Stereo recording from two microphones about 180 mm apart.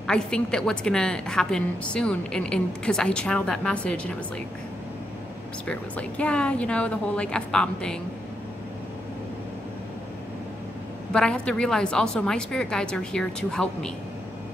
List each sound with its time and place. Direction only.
0.0 s a woman's voice: 5° left (ahead or behind)
5.7 s a woman's voice: 5° left (ahead or behind)
11.1 s a woman's voice: 5° left (ahead or behind)